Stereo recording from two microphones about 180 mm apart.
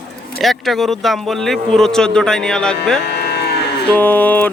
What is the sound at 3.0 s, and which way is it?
Moo, 70° left (ahead or behind).